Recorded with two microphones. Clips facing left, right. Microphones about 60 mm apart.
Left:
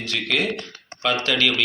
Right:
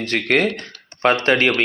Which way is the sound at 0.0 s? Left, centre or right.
Right.